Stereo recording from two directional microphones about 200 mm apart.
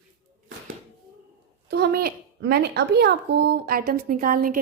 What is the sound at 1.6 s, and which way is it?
A child's voice, 55° right (ahead or behind).